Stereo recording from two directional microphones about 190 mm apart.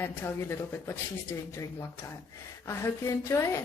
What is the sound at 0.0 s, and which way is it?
Speech, 10° left (ahead or behind).